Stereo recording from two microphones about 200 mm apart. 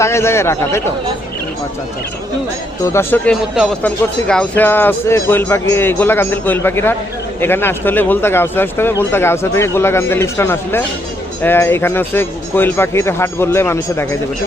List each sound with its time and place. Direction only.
0.0 s speech: 15° left (ahead or behind)
2.8 s speech: 10° left (ahead or behind)